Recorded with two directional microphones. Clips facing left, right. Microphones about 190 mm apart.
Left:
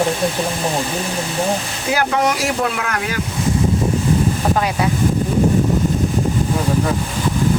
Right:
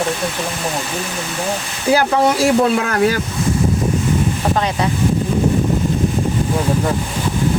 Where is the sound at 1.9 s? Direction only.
30° right (ahead or behind).